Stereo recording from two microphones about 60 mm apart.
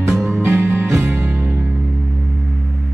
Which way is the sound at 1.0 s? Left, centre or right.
Right.